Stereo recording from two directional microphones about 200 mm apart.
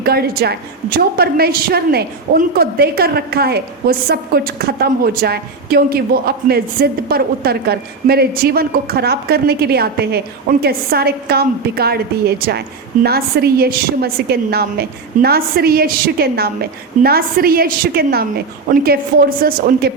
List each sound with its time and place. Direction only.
0.0 s a woman's voice: 50° right (ahead or behind)